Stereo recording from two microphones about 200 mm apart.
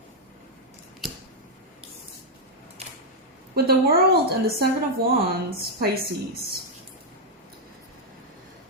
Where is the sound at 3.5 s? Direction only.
50° right (ahead or behind).